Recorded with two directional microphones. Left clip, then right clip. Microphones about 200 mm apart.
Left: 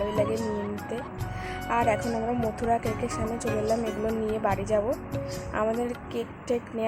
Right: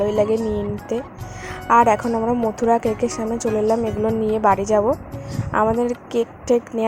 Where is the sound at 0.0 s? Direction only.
20° right (ahead or behind).